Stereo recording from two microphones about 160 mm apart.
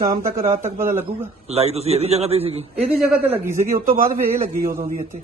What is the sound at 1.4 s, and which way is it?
A man's voice, 40° right (ahead or behind).